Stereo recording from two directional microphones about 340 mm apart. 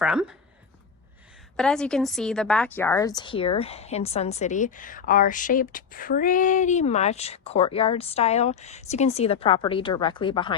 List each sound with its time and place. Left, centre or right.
0.0 s speech: centre
1.5 s a woman's voice: centre